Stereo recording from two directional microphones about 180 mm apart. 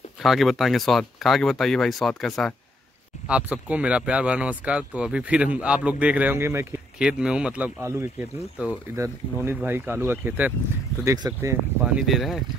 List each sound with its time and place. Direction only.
0.2 s speech: centre (ahead or behind); by 11.5 s 15° right (ahead or behind)
11.8 s speech: centre (ahead or behind)